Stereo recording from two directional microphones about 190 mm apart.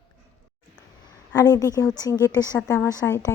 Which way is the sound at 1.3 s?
15° left (ahead or behind).